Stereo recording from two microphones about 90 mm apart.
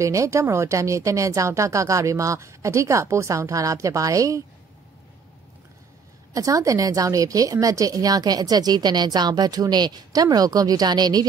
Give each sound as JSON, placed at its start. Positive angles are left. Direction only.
{"t": 0.0, "sound": "speech", "side_deg": -35}
{"t": 6.3, "sound": "speech", "side_deg": -40}